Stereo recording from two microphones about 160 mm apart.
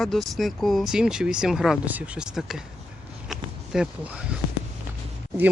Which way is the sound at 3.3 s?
5° right (ahead or behind).